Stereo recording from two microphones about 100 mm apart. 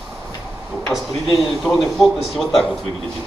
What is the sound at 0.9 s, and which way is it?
Speech, centre (ahead or behind).